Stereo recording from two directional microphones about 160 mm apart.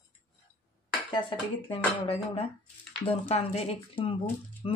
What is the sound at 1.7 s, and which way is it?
A woman's voice, 35° left (ahead or behind).